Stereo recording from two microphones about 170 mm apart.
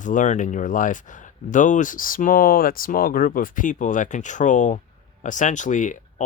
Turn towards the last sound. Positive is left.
turn(degrees=45)  # may be behind; listen again after turning